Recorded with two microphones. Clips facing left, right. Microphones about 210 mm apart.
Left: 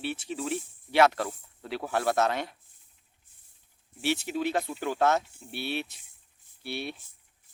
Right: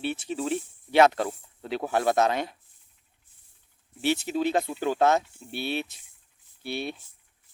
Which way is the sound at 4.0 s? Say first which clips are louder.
Right 3 dB; 20° right (ahead or behind).